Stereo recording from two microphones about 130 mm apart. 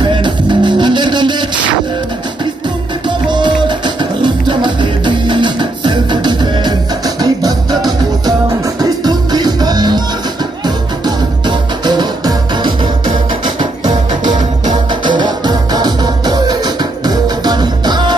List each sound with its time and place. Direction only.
0.0 s music: 35° right (ahead or behind)
3.3 s music: 35° right (ahead or behind)
11.1 s music: 35° right (ahead or behind)